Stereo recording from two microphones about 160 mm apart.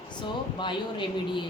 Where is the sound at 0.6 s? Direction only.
30° left (ahead or behind).